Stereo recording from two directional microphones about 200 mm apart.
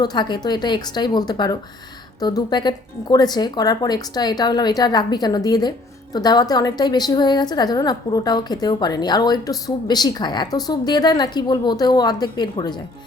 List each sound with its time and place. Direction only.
0.0 s a woman's voice: 20° left (ahead or behind)